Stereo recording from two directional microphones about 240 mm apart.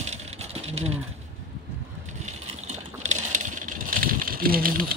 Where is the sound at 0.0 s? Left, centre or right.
Right.